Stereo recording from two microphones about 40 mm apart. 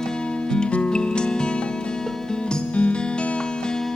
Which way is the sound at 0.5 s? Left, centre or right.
Left.